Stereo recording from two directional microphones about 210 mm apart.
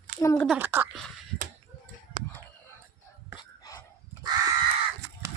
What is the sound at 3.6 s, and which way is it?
Dog, 15° left (ahead or behind).